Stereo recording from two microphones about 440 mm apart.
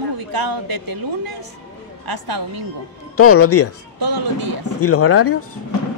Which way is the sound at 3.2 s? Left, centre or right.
Left.